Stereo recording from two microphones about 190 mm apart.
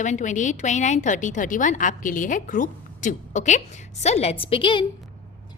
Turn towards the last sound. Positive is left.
turn(degrees=25)  # may be behind; listen again after turning